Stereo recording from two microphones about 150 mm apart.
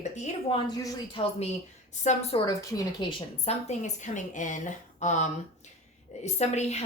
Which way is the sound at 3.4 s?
45° left (ahead or behind).